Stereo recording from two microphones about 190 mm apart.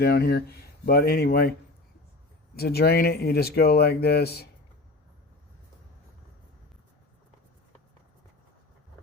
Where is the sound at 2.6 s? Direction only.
55° left (ahead or behind).